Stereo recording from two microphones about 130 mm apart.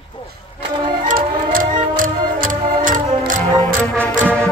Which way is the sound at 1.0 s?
90° right.